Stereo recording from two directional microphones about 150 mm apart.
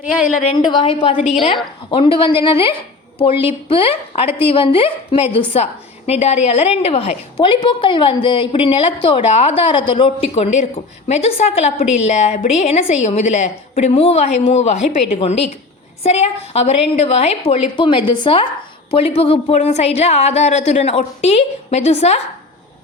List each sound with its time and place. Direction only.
0.1 s a woman's voice: 5° right (ahead or behind)
0.6 s a woman's voice: 30° left (ahead or behind)
1.2 s a woman's voice: 45° left (ahead or behind)